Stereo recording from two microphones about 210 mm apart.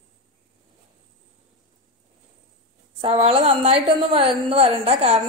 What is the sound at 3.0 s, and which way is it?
A woman's voice, 30° right (ahead or behind).